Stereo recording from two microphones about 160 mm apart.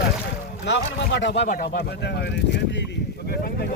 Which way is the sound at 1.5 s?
70° left (ahead or behind).